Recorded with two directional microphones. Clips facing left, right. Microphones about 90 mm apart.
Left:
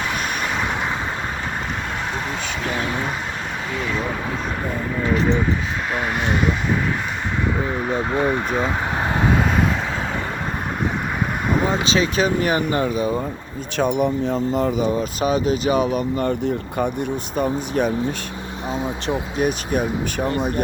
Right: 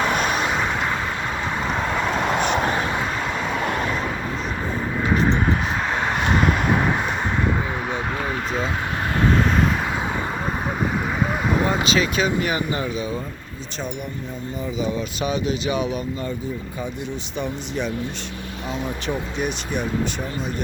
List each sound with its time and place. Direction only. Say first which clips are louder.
9.2 s vehicle: right 1 dB; 5° left (ahead or behind)
11.5 s vehicle: left 2 dB; centre (ahead or behind)
11.9 s speech: left 2 dB; 35° left (ahead or behind)
13.7 s speech: left 11 dB; 60° left (ahead or behind)
14.8 s speech: left 4 dB; 45° left (ahead or behind)
16.4 s speech: left 7 dB; 60° left (ahead or behind)
18.7 s speech: left 3 dB; 25° left (ahead or behind)
19.4 s speech: left 5 dB; 45° left (ahead or behind)